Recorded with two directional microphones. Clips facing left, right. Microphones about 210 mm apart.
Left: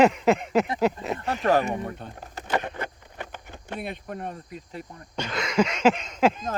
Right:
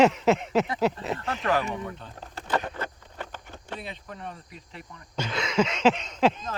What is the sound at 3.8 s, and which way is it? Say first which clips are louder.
Speech: left 5 dB; 55° left (ahead or behind).